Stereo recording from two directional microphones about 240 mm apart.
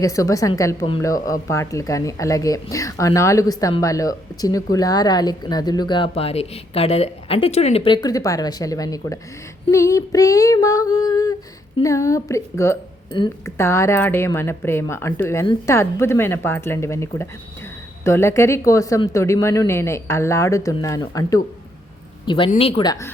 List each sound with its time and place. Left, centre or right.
0.0 s a woman's voice: centre